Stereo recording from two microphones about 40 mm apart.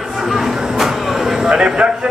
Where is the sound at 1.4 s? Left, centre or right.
Right.